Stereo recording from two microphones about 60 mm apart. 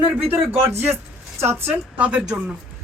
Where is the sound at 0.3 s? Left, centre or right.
Right.